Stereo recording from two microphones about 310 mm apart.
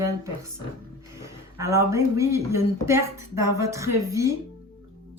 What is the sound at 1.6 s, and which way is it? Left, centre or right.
Speech, centre.